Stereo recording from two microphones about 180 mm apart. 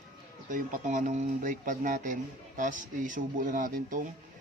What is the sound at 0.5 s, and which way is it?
Speech, 45° right (ahead or behind).